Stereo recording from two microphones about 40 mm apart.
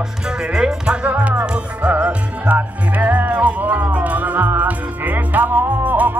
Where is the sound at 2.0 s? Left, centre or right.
Right.